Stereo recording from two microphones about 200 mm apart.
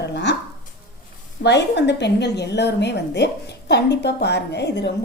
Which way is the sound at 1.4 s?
55° left (ahead or behind).